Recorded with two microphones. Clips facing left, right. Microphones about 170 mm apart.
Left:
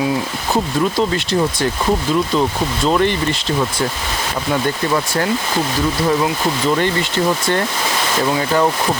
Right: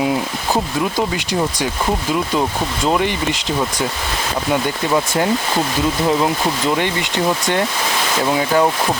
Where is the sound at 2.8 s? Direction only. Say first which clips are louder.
Left 2 dB; 15° right (ahead or behind).